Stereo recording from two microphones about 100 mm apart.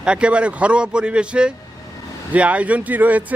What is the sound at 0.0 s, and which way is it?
Speech, 10° right (ahead or behind).